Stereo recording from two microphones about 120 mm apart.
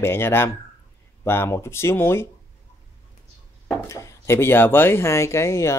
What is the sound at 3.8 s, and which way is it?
Speech, 25° left (ahead or behind).